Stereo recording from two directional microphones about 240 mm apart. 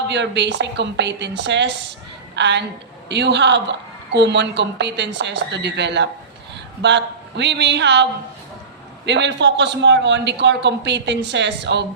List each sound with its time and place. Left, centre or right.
0.1 s a woman's voice: right
9.0 s a woman's voice: right